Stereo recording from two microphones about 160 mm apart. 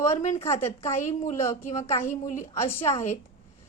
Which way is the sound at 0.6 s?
15° left (ahead or behind).